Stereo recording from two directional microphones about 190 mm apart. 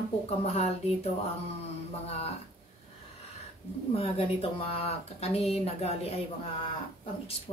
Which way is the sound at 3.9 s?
30° left (ahead or behind).